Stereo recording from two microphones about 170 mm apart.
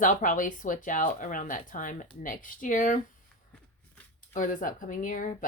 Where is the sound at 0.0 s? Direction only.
50° left (ahead or behind).